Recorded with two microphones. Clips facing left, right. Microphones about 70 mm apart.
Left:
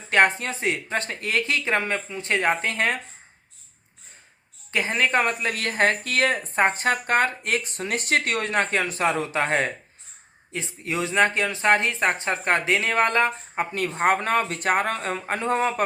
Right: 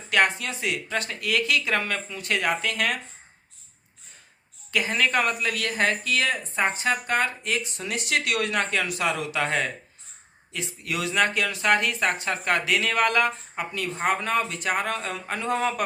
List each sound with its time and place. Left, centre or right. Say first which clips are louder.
0.1 s speech: left 3 dB; left
4.7 s speech: left 1 dB; left
13.7 s speech: left 4 dB; left